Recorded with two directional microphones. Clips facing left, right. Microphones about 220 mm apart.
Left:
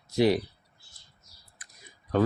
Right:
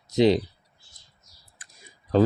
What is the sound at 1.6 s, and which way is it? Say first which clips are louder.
Typing: right 1 dB; 30° right (ahead or behind).